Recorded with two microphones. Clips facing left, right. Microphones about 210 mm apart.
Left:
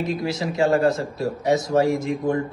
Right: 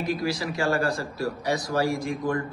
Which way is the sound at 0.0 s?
20° left (ahead or behind).